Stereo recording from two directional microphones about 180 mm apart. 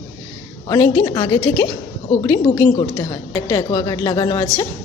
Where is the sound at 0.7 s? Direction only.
20° left (ahead or behind).